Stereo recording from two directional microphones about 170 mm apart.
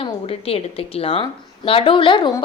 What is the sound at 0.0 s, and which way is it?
Speech, 35° left (ahead or behind).